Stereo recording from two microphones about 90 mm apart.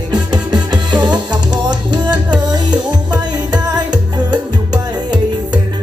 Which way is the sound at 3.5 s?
55° right (ahead or behind).